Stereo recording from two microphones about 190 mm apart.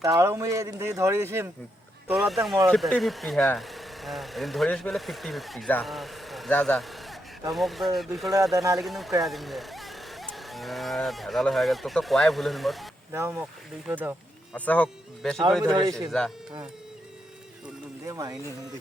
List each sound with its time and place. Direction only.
0.0 s speech: 15° right (ahead or behind)
2.0 s speech: centre (ahead or behind)
13.1 s speech: 15° right (ahead or behind)
14.5 s speech: 5° left (ahead or behind)
15.6 s a man's voice: 20° right (ahead or behind)
18.0 s speech: 15° right (ahead or behind)